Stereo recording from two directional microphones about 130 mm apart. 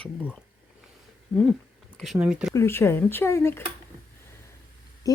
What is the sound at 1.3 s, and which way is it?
Speech, centre (ahead or behind).